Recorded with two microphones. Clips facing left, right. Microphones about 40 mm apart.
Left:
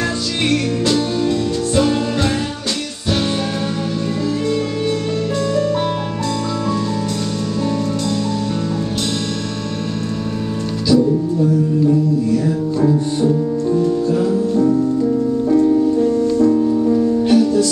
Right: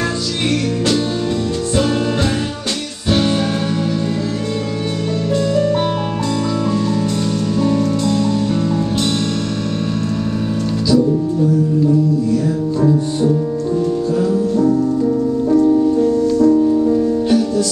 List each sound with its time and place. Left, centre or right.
12.8 s music: centre
16.6 s music: centre